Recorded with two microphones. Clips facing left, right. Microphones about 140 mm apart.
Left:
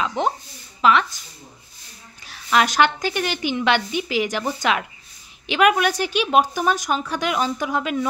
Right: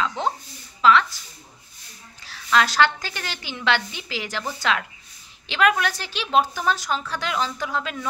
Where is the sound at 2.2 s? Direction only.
15° left (ahead or behind).